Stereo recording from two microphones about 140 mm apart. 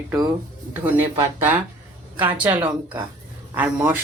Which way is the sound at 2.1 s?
10° right (ahead or behind).